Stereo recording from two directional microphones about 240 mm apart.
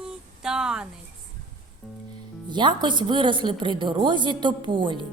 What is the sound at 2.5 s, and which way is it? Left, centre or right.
A woman's voice, centre.